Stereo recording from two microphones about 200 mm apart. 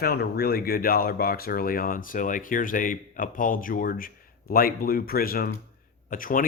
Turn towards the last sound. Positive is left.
turn(degrees=45)  # may be behind; listen again after turning